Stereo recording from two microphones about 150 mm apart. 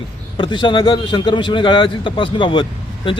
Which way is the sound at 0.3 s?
30° left (ahead or behind).